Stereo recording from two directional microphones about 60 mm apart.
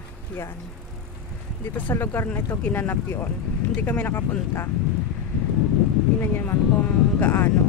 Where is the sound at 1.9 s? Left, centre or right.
Left.